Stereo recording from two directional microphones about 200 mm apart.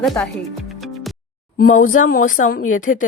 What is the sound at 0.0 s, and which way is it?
Speech, centre (ahead or behind).